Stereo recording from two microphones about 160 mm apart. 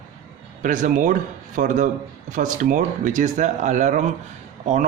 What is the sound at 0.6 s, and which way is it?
Speech, 55° right (ahead or behind).